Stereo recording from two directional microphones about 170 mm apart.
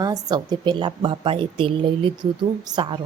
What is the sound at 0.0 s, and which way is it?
A woman's voice, 25° right (ahead or behind).